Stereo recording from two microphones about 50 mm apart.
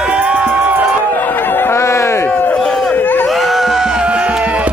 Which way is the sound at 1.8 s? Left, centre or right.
Left.